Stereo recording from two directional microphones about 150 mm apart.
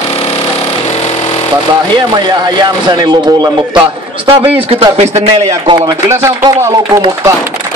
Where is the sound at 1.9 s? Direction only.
30° right (ahead or behind); by 5.4 s 45° right (ahead or behind).